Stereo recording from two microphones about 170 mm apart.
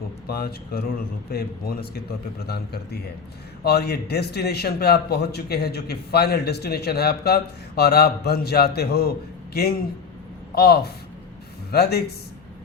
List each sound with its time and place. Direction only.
0.3 s a man's voice: 65° left (ahead or behind)